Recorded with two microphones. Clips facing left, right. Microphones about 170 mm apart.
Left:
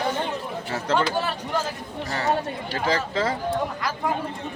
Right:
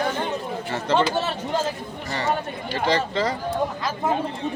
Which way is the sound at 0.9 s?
20° right (ahead or behind).